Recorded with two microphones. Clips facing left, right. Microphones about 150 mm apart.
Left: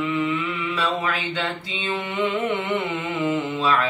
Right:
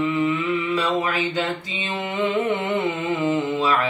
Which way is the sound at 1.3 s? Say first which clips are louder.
Right 2 dB; 40° right (ahead or behind).